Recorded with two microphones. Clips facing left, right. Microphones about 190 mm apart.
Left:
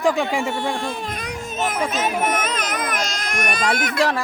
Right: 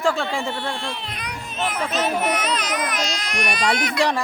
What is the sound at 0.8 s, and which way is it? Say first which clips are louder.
Speech: left 4 dB; 45° left (ahead or behind).